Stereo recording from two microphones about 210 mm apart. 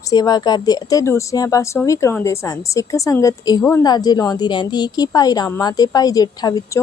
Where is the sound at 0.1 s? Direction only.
20° left (ahead or behind).